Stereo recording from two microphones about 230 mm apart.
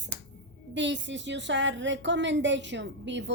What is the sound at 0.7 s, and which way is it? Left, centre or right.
Speech, right.